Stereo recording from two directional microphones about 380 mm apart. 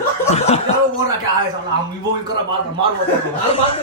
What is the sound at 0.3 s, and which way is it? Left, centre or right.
Speech, centre.